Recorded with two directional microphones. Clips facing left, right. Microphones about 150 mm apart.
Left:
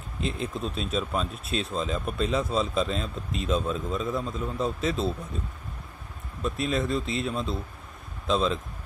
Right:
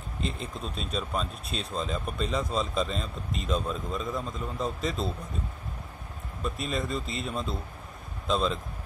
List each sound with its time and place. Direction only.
0.2 s speech: centre (ahead or behind)
6.4 s speech: centre (ahead or behind)